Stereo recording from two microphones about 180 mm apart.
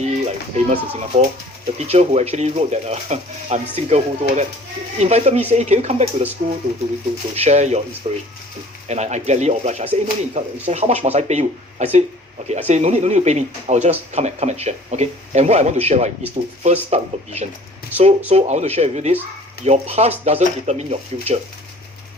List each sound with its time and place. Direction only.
0.0 s speech: 40° right (ahead or behind)
7.3 s speech: 35° right (ahead or behind)